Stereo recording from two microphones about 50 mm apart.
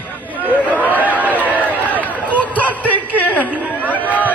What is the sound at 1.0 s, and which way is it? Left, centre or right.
Speech, right.